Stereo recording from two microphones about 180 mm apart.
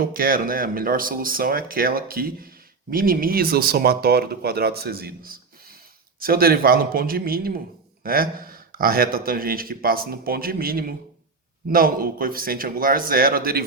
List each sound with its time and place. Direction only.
0.0 s speech: 55° right (ahead or behind)